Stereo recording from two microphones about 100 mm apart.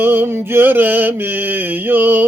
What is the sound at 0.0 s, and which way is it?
Mantra, 20° right (ahead or behind).